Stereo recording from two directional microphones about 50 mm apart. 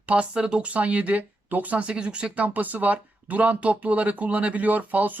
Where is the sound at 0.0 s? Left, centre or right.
Right.